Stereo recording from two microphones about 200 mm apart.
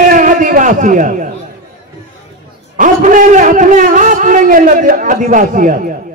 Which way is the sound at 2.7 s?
40° right (ahead or behind).